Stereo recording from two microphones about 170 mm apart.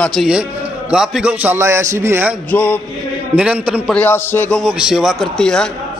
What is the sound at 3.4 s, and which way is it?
Speech, 5° right (ahead or behind).